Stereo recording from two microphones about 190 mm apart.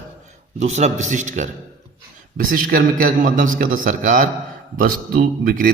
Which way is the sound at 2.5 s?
45° right (ahead or behind).